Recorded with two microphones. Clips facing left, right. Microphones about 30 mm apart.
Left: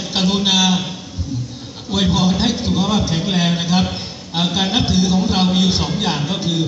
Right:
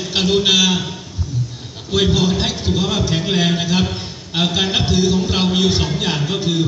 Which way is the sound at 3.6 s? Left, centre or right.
Left.